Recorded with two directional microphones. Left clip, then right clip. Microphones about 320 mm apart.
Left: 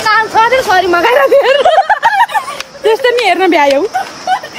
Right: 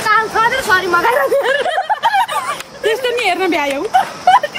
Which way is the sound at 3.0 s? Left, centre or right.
Centre.